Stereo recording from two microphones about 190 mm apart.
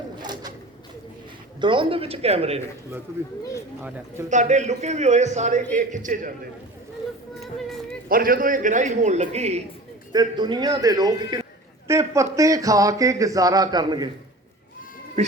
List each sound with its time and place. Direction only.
0.2 s a sound: 20° right (ahead or behind)
1.6 s a man's voice: 25° right (ahead or behind)
3.8 s speech: 10° right (ahead or behind)
4.3 s a man's voice: 40° right (ahead or behind)
8.1 s a man's voice: 50° right (ahead or behind)
10.1 s a man's voice: 25° right (ahead or behind)